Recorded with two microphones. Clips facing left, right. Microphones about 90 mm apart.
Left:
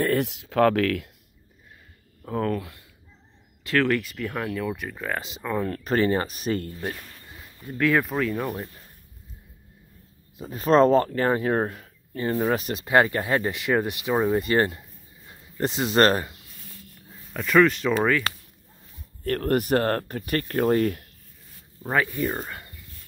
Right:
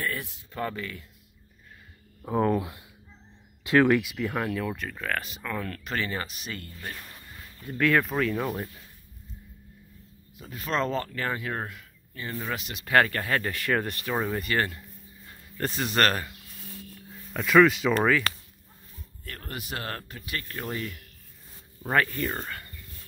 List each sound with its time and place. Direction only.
0.0 s speech: 65° left (ahead or behind); by 1.0 s 90° left
2.2 s speech: 15° right (ahead or behind)
4.7 s speech: 10° left (ahead or behind)
5.9 s speech: 35° left (ahead or behind)
7.0 s speech: 5° left (ahead or behind)
10.3 s speech: 35° left (ahead or behind)
12.8 s speech: 20° left (ahead or behind)
14.4 s speech: 30° left (ahead or behind)
15.2 s speech: 20° left (ahead or behind)
17.2 s speech: centre (ahead or behind)
19.2 s speech: 55° left (ahead or behind)
21.8 s speech: 10° left (ahead or behind)